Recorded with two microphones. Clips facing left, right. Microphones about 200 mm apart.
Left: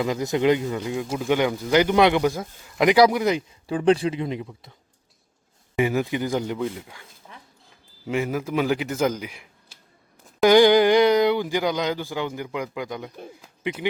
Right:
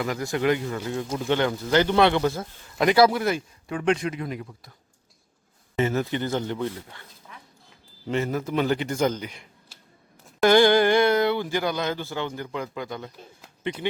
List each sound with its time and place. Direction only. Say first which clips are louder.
0.0 s speech: left 3 dB; 20° left (ahead or behind)
0.9 s speech: left 1 dB; 10° left (ahead or behind)
3.7 s speech: left 5 dB; 30° left (ahead or behind)
5.7 s speech: left 2 dB; 10° left (ahead or behind)
7.3 s a sound: left 1 dB; 30° left (ahead or behind)
8.0 s speech: left 1 dB; 10° left (ahead or behind)